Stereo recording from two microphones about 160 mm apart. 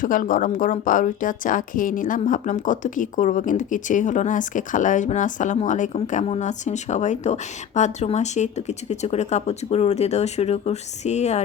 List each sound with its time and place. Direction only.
0.0 s a woman's voice: 60° left (ahead or behind)